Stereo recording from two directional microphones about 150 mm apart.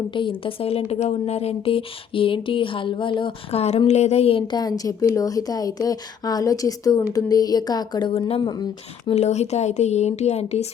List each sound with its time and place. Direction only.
0.1 s speech: 35° left (ahead or behind)
9.1 s speech: 45° left (ahead or behind)